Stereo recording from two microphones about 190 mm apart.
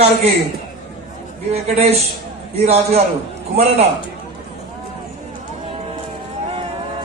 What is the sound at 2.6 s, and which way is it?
A man's voice, 35° right (ahead or behind).